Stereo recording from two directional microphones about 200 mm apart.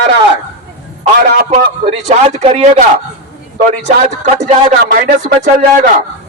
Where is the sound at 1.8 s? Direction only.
30° right (ahead or behind).